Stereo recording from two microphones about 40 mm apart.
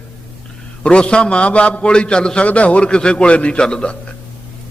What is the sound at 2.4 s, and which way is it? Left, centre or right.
Speech, left.